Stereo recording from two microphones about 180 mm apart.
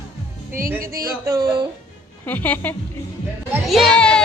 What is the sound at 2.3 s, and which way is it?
Speech, 10° left (ahead or behind).